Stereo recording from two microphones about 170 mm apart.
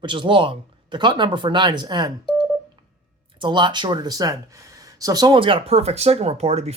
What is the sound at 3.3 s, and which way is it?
Speech, 30° right (ahead or behind).